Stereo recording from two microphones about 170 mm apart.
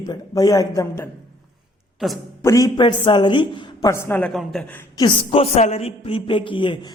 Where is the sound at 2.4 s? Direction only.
20° left (ahead or behind).